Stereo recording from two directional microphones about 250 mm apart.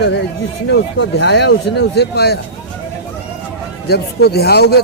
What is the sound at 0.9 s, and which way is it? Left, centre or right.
Speech, left.